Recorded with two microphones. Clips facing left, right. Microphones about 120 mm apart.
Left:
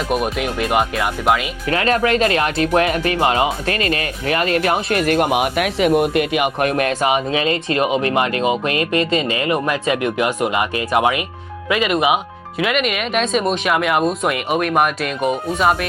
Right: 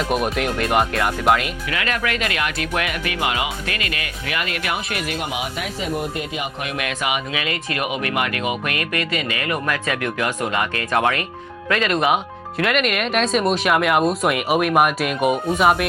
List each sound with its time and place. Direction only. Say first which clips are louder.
0.1 s speech: left 1 dB; centre (ahead or behind)
1.7 s speech: left 8 dB; 35° left (ahead or behind); by 6.7 s 70° left (ahead or behind)
6.7 s speech: left 7 dB; 40° left (ahead or behind); by 15.9 s 5° right (ahead or behind)